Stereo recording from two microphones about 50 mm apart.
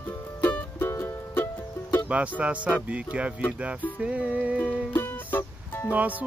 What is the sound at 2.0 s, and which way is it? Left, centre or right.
Speech, right.